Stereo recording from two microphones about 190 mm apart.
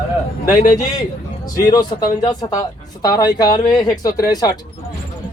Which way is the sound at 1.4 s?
20° left (ahead or behind).